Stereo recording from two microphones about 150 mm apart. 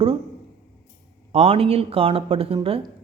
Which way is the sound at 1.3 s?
40° right (ahead or behind).